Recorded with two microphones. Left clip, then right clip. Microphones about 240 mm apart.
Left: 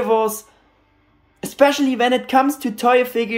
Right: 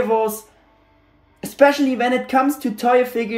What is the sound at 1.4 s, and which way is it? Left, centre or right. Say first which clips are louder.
A woman's voice: right 1 dB; centre.